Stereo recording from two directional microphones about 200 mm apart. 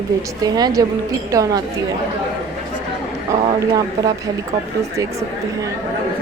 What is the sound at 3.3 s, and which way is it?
A woman's voice, 20° right (ahead or behind).